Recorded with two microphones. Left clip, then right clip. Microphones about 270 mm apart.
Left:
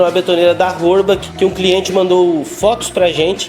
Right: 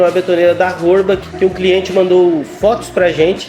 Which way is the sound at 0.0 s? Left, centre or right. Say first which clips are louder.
Even; centre.